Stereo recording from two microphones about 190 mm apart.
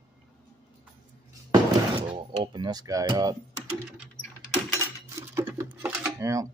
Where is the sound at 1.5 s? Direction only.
25° right (ahead or behind).